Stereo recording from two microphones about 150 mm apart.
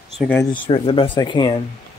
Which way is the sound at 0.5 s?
35° left (ahead or behind).